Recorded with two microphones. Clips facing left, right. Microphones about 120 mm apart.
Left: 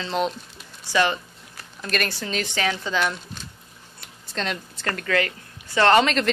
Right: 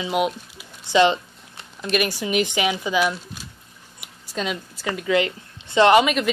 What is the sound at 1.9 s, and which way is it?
Speech, 10° right (ahead or behind).